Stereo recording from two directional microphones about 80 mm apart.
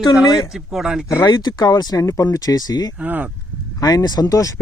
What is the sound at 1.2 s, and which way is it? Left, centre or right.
Speech, left.